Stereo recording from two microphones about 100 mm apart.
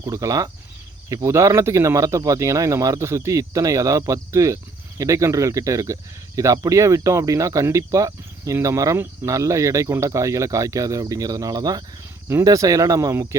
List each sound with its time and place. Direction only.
0.0 s speech: 35° right (ahead or behind)